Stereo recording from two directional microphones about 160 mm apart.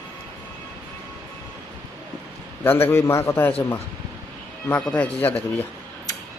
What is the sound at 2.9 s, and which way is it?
Speech, 15° left (ahead or behind).